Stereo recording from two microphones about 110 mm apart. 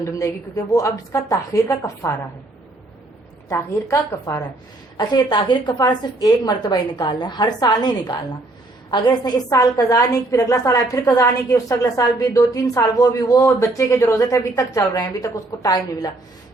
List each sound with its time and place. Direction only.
0.0 s a woman's voice: 30° left (ahead or behind)
3.5 s a woman's voice: 30° left (ahead or behind)
4.9 s a woman's voice: 40° left (ahead or behind)